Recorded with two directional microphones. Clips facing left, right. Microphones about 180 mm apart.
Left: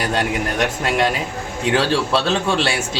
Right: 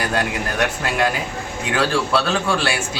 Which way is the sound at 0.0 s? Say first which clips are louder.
Left 2 dB; 25° left (ahead or behind).